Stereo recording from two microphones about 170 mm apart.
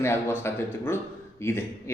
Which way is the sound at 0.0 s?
15° left (ahead or behind).